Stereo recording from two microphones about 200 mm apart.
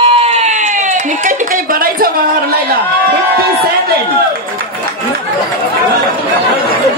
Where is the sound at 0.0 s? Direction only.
30° right (ahead or behind).